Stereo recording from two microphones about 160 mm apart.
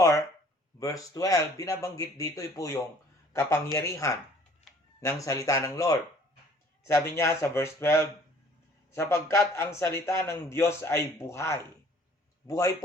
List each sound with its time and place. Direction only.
0.8 s a man's voice: 20° left (ahead or behind)